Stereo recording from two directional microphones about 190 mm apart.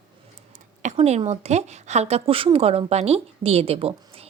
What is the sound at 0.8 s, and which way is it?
Speech, 35° right (ahead or behind).